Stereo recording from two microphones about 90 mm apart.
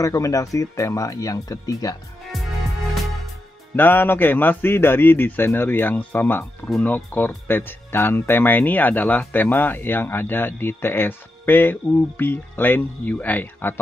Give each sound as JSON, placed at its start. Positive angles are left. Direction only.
{"t": 0.0, "sound": "speech", "side_deg": 40}
{"t": 3.7, "sound": "speech", "side_deg": 20}